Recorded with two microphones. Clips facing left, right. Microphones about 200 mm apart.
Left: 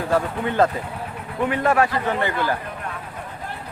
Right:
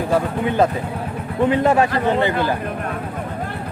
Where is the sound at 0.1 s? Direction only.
15° right (ahead or behind).